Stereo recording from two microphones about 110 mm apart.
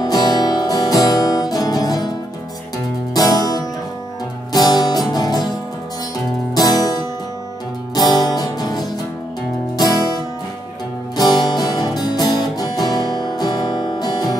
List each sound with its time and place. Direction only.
0.0 s music: 40° left (ahead or behind)
3.2 s music: 35° left (ahead or behind)
6.5 s music: 35° left (ahead or behind)
7.9 s music: 40° left (ahead or behind)
11.1 s music: 40° left (ahead or behind)